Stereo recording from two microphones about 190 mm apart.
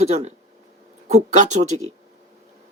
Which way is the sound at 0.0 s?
35° right (ahead or behind).